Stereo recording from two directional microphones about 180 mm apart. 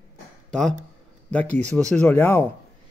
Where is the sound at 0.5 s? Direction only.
5° left (ahead or behind).